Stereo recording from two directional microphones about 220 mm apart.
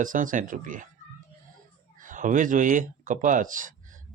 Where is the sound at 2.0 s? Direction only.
35° right (ahead or behind).